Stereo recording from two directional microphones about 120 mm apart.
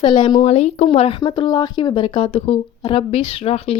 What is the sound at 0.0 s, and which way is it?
Speech, 40° left (ahead or behind).